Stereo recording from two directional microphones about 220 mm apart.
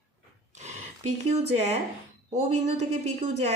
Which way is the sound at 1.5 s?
30° right (ahead or behind).